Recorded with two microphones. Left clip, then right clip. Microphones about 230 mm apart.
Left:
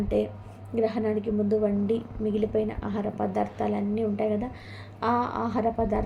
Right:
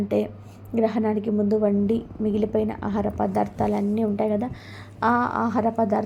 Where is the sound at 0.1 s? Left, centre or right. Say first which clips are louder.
Right 2 dB; right.